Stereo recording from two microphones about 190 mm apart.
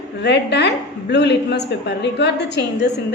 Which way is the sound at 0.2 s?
65° left (ahead or behind).